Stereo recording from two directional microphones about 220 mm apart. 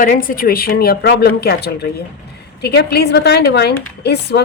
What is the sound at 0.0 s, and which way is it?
A woman's voice, 40° left (ahead or behind).